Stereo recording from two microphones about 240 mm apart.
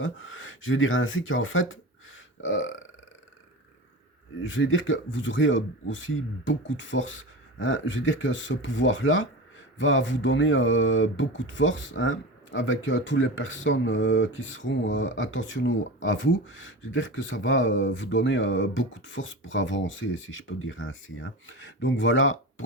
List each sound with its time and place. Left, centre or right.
0.0 s speech: left
4.4 s speech: left